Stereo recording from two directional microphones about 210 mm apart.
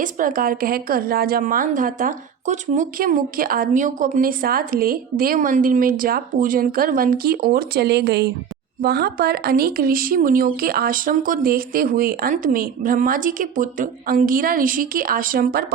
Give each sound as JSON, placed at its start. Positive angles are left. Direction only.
{"t": 0.0, "sound": "a woman's voice", "side_deg": -40}